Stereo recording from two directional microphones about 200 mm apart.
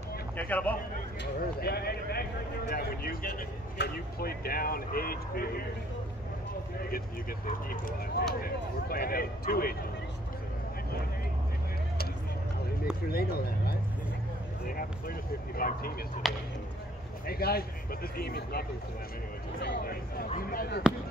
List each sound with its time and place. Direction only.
0.4 s speech: 10° left (ahead or behind)
1.6 s speech: 50° left (ahead or behind)
7.4 s speech: 45° left (ahead or behind)
13.1 s speech: 50° left (ahead or behind)
14.8 s speech: 45° left (ahead or behind)
16.2 s speech: centre (ahead or behind)
17.3 s speech: 50° left (ahead or behind)
20.3 s speech: 45° left (ahead or behind)